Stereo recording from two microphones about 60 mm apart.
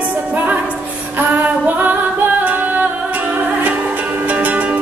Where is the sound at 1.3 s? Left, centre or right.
Right.